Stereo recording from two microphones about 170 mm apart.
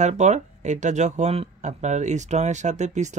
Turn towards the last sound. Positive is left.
turn(degrees=-45)  # may be behind; listen again after turning